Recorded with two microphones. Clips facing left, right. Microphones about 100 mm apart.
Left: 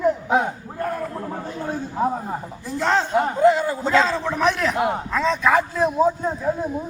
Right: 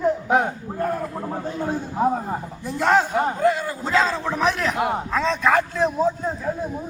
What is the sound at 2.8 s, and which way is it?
Speech, 10° right (ahead or behind).